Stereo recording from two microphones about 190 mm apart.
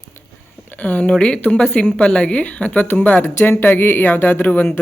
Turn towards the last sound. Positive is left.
turn(degrees=10)  # may be behind; listen again after turning